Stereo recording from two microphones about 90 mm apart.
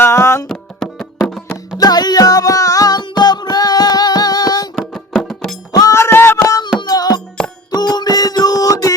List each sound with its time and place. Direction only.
0.0 s music: 30° left (ahead or behind)
0.4 s music: 5° left (ahead or behind)
1.8 s music: 50° left (ahead or behind)
4.7 s music: centre (ahead or behind)
5.9 s a sound: 30° left (ahead or behind)
6.6 s music: 50° left (ahead or behind)
7.9 s a sound: 45° left (ahead or behind)